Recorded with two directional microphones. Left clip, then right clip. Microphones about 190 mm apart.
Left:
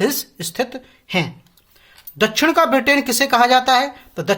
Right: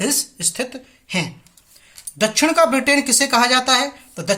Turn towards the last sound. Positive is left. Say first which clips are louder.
# left 2 dB
turn(degrees=45)  # may be behind; listen again after turning